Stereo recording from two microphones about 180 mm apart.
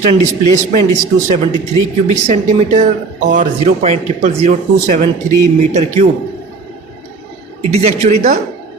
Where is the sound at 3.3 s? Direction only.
40° right (ahead or behind).